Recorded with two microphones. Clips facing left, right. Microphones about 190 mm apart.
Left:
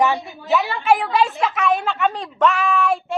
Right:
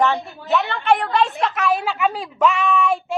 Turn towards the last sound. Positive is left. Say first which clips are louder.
# even
turn(degrees=0)  # may be behind; listen again after turning